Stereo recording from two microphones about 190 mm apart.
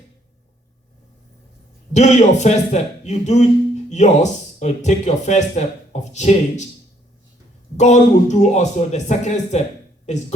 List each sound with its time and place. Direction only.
1.9 s speech: 35° left (ahead or behind)
7.8 s speech: 40° left (ahead or behind)